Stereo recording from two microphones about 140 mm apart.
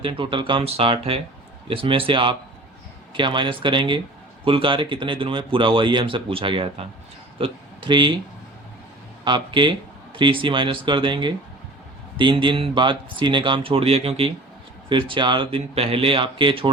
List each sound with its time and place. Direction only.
0.0 s speech: 35° right (ahead or behind)
9.2 s speech: 35° right (ahead or behind)